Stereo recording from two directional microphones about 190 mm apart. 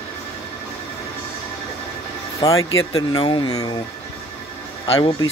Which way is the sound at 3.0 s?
20° left (ahead or behind).